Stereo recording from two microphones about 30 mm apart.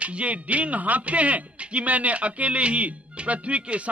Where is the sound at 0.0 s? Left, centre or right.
Right.